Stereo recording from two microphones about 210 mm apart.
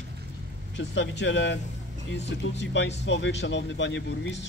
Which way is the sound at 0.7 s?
60° left (ahead or behind).